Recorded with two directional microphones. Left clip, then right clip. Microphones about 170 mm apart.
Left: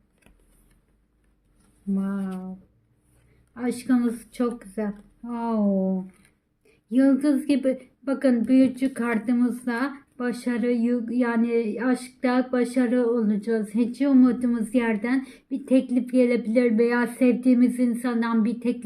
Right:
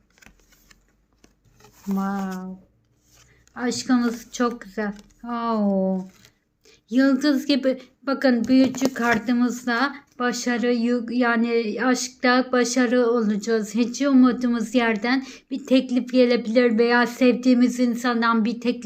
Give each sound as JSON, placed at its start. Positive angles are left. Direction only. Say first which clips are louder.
{"t": 2.0, "sound": "speech", "louder": "right 5 dB", "side_deg": 10}
{"t": 3.5, "sound": "speech", "louder": "right 2 dB", "side_deg": 15}
{"t": 6.7, "sound": "speech", "louder": "right 1 dB", "side_deg": 10}